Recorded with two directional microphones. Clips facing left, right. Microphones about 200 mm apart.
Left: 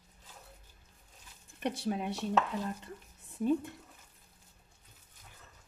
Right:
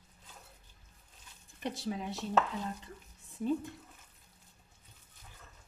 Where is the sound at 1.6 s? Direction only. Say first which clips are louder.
Left 3 dB; 60° left (ahead or behind).